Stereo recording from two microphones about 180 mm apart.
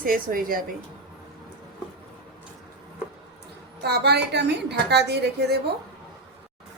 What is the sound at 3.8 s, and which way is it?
A woman's voice, 65° right (ahead or behind).